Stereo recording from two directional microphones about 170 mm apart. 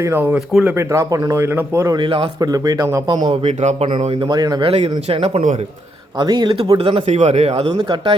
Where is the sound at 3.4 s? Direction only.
40° right (ahead or behind); by 4.7 s 25° right (ahead or behind).